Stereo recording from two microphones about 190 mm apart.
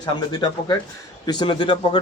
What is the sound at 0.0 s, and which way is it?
Speech, 20° left (ahead or behind).